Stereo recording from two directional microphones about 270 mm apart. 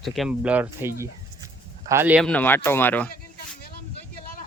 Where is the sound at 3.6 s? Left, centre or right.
Left.